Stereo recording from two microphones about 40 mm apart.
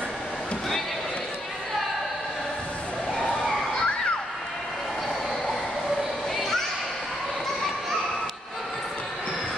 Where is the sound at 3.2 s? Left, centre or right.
Left.